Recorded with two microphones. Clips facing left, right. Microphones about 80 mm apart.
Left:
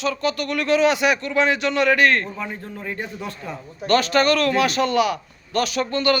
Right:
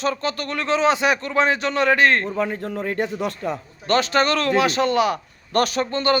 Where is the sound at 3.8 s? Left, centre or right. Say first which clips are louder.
Left 1 dB; right.